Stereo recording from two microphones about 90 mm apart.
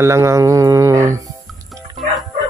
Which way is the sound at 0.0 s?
35° right (ahead or behind).